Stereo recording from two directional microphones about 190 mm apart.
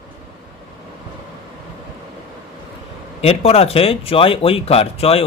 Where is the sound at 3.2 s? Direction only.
30° left (ahead or behind).